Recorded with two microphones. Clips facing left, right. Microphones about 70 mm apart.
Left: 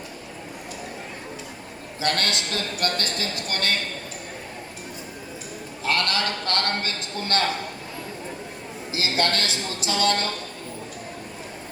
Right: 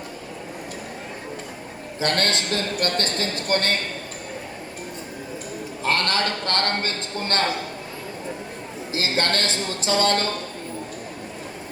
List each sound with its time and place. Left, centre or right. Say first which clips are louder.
2.0 s a man's voice: right 2 dB; right
5.8 s a man's voice: right 2 dB; right
8.9 s a man's voice: right 1 dB; right